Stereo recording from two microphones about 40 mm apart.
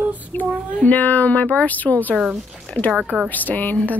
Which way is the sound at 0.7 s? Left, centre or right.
Left.